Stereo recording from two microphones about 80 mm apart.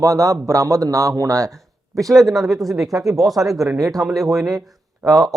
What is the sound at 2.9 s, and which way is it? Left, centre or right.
Speech, right.